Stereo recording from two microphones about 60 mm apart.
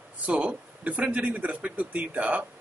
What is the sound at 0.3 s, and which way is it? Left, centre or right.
Speech, centre.